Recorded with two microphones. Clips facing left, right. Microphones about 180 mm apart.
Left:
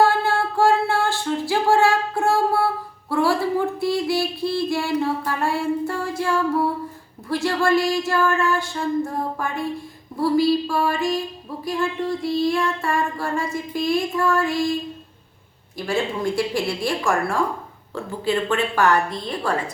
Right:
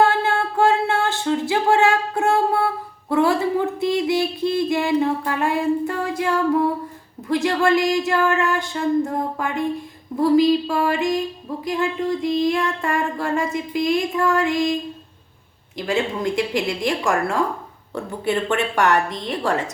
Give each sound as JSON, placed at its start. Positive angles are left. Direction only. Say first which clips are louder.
{"t": 0.0, "sound": "music", "louder": "even", "side_deg": -20}
{"t": 3.1, "sound": "a sound", "louder": "right 2 dB", "side_deg": -20}
{"t": 7.3, "sound": "music", "louder": "right 2 dB", "side_deg": -20}
{"t": 10.2, "sound": "a woman's voice", "louder": "right 3 dB", "side_deg": -20}
{"t": 11.6, "sound": "music", "louder": "right 1 dB", "side_deg": -20}
{"t": 15.9, "sound": "a woman's voice", "louder": "right 1 dB", "side_deg": -20}